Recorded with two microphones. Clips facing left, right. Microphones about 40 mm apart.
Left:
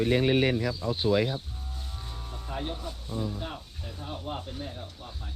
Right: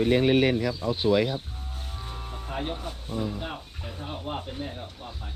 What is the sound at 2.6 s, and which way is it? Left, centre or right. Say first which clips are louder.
Speech: right 3 dB; right.